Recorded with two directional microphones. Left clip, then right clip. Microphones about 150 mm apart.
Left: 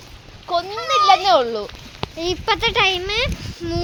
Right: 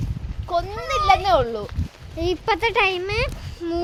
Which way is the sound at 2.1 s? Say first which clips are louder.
Left 1 dB; 40° right (ahead or behind).